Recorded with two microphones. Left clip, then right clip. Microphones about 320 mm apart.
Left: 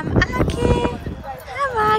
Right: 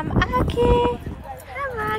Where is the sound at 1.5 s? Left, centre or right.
Centre.